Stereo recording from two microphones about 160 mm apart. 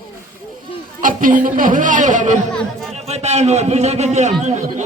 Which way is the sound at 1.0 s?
55° right (ahead or behind).